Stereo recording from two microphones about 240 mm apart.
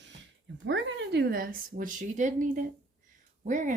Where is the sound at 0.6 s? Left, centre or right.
Right.